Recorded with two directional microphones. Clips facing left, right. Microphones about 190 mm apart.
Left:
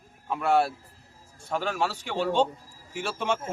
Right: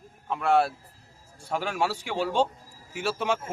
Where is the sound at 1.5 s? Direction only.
10° right (ahead or behind).